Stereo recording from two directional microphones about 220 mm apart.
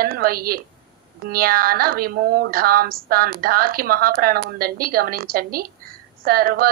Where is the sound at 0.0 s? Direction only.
40° right (ahead or behind).